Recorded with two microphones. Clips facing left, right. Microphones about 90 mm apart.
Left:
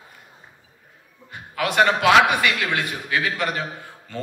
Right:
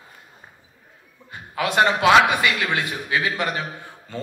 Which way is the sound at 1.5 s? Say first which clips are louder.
Even; 25° right (ahead or behind).